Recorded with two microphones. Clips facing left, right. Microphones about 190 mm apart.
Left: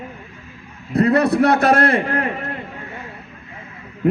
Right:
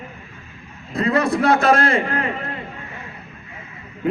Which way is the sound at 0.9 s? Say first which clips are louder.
Left 4 dB; 65° left (ahead or behind).